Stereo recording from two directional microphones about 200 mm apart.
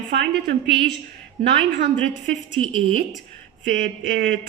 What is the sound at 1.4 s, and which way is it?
A woman's voice, 45° right (ahead or behind).